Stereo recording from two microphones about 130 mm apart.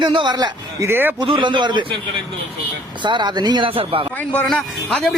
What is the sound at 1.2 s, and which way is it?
Speech, 40° right (ahead or behind).